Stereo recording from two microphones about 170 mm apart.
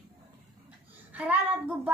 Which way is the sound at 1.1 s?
10° right (ahead or behind).